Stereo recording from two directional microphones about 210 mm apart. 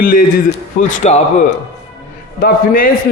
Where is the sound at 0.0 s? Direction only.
40° left (ahead or behind).